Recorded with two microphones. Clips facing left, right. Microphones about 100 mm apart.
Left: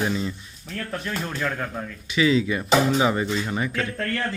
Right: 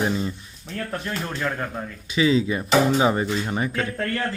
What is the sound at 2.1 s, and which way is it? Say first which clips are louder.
Speech: right 1 dB; 30° right (ahead or behind).